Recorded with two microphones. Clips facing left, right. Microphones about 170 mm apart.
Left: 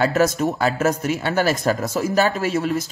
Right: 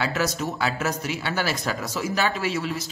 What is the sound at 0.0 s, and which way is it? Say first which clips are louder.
Speech: left 8 dB; 50° left (ahead or behind).